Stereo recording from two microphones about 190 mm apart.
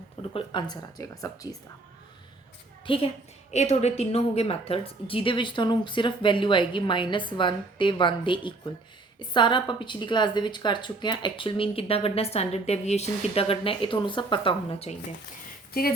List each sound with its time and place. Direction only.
0.2 s a woman's voice: 25° left (ahead or behind)
2.8 s a woman's voice: 30° left (ahead or behind)